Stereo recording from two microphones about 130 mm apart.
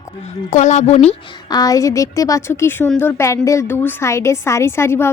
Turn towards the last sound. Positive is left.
turn(degrees=20)  # may be behind; listen again after turning